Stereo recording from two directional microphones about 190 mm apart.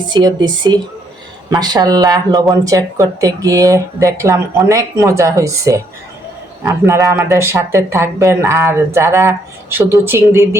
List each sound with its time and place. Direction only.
0.1 s speech: 20° right (ahead or behind)